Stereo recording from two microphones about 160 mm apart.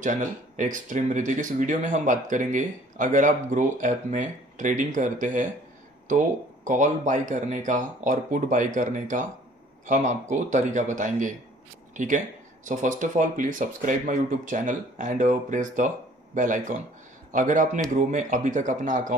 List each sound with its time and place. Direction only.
0.0 s speech: 55° right (ahead or behind)